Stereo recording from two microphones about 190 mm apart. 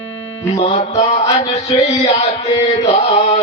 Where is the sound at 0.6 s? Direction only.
35° left (ahead or behind).